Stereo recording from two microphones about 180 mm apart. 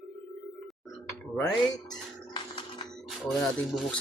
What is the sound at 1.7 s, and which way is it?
Music, 25° left (ahead or behind).